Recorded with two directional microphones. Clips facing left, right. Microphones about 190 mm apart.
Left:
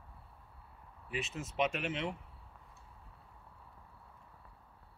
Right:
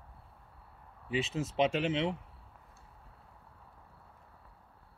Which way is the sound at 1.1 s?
30° right (ahead or behind).